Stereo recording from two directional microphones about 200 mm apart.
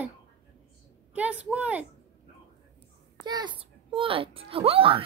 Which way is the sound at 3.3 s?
20° right (ahead or behind).